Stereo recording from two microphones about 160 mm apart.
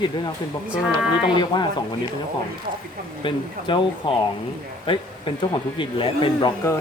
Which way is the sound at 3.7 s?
30° left (ahead or behind).